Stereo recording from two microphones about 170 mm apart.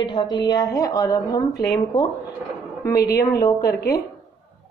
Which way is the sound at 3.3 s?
20° left (ahead or behind).